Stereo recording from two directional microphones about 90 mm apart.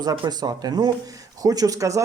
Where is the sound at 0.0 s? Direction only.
45° right (ahead or behind).